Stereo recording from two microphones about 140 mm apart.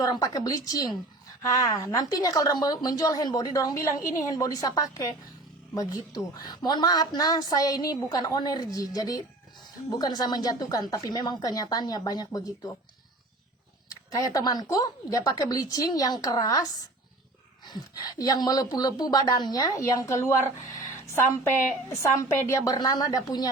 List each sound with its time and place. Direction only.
0.0 s a woman's voice: 25° left (ahead or behind)
14.1 s a woman's voice: 25° left (ahead or behind)
17.7 s a woman's voice: 25° left (ahead or behind)
22.0 s a woman's voice: 25° left (ahead or behind)